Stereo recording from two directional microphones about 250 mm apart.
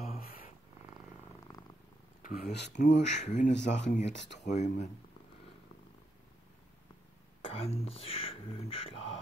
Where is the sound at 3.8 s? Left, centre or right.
Left.